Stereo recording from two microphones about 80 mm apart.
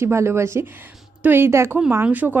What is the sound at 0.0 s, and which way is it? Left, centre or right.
Speech, right.